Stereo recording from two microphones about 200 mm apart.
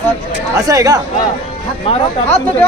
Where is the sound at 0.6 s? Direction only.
15° right (ahead or behind).